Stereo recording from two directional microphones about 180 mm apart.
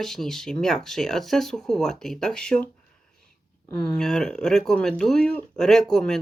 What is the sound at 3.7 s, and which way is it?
Speech, 5° left (ahead or behind).